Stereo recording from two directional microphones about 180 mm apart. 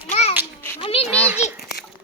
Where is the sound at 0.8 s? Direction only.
30° left (ahead or behind).